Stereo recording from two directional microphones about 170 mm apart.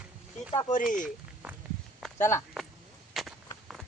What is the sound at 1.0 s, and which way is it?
Walk, 10° right (ahead or behind).